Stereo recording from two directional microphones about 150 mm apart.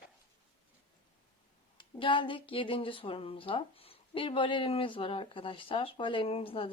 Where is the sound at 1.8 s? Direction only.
35° left (ahead or behind).